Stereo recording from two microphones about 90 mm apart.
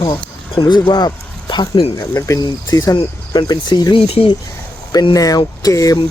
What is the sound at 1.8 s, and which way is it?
Speech, 80° left.